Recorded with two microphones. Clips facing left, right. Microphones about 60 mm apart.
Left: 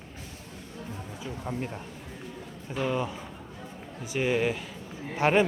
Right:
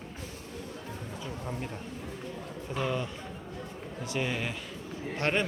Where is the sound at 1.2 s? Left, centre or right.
Centre.